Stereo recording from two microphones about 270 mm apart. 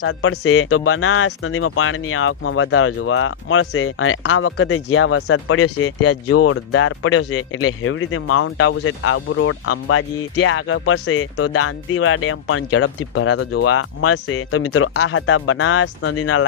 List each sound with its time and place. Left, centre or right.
0.0 s speech: left